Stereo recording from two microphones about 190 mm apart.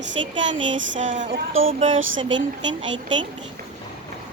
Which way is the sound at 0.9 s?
40° right (ahead or behind).